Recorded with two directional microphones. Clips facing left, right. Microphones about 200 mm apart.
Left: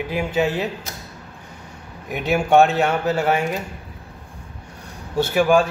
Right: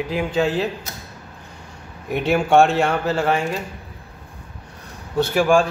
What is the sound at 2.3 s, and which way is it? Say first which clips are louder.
A man's voice: even; 5° left (ahead or behind).